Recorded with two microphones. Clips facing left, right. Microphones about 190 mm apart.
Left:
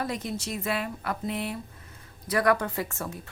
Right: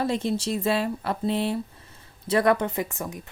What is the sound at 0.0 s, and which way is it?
Speech, 30° right (ahead or behind).